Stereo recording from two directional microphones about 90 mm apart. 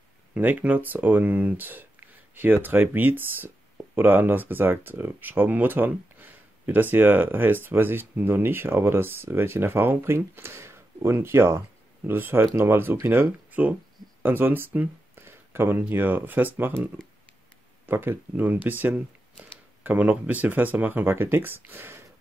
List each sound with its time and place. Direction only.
0.3 s speech: 20° right (ahead or behind)